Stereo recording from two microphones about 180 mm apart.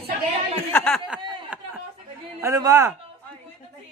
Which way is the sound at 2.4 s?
20° right (ahead or behind).